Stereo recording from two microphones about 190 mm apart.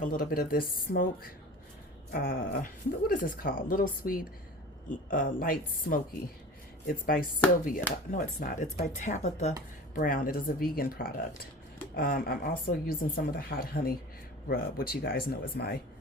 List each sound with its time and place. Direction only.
0.0 s speech: 45° left (ahead or behind)
2.1 s speech: 50° left (ahead or behind)
9.9 s speech: 50° left (ahead or behind)